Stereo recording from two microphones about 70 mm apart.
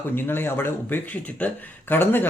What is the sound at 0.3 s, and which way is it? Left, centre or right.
Speech, left.